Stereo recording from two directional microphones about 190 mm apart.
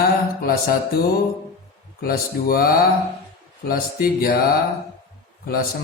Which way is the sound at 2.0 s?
50° left (ahead or behind).